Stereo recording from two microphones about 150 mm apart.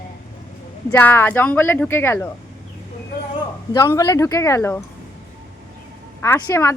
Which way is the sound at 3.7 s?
20° left (ahead or behind).